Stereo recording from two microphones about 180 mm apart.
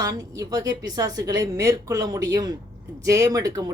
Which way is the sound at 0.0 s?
20° right (ahead or behind).